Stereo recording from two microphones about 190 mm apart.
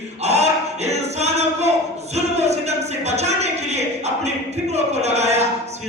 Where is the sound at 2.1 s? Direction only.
35° right (ahead or behind).